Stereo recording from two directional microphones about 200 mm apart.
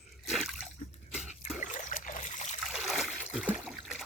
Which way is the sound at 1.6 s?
40° left (ahead or behind).